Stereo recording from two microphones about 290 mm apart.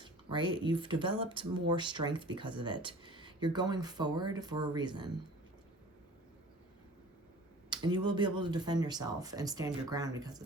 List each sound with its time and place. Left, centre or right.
0.0 s speech: centre
7.7 s speech: centre